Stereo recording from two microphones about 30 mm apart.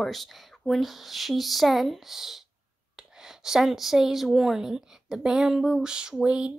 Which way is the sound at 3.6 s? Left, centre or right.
Centre.